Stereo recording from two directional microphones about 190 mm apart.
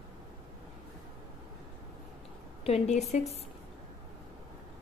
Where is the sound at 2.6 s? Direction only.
35° left (ahead or behind).